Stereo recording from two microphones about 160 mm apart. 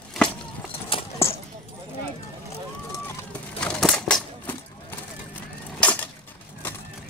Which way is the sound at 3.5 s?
5° left (ahead or behind).